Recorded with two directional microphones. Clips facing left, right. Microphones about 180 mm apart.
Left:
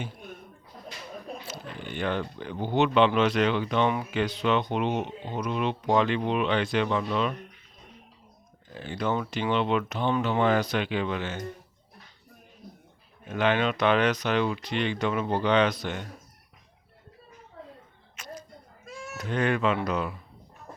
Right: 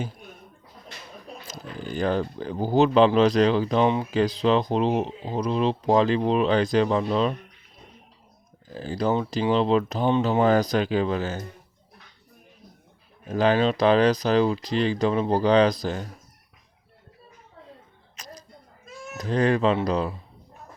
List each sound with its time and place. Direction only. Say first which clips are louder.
1.5 s speech: right 3 dB; 40° right (ahead or behind)
8.7 s speech: right 4 dB; 35° right (ahead or behind)
13.2 s speech: right 4 dB; 35° right (ahead or behind)
18.2 s a sound: left 1 dB; 35° right (ahead or behind)
19.1 s speech: right 5 dB; 35° right (ahead or behind)